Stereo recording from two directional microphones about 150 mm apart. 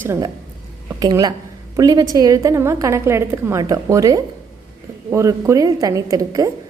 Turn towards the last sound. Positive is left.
turn(degrees=-25)  # may be behind; listen again after turning